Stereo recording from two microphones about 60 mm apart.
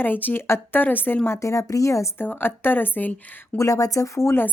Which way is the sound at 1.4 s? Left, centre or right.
Left.